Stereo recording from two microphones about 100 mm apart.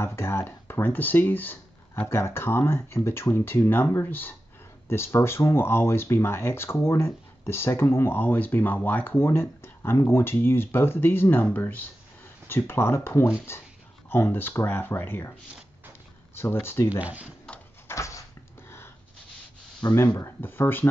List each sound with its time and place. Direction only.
0.0 s speech: 25° left (ahead or behind)
16.3 s speech: 25° left (ahead or behind)
17.0 s speech: 15° right (ahead or behind)
17.8 s a sound: 30° left (ahead or behind)
19.8 s speech: 45° left (ahead or behind)
20.2 s speech: 25° left (ahead or behind)